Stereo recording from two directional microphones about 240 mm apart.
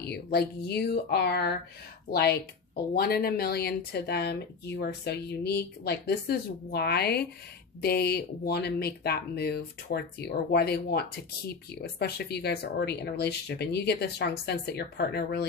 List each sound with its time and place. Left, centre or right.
0.0 s speech: left